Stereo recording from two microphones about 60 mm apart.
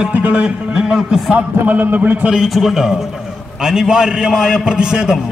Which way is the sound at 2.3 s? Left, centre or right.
Centre.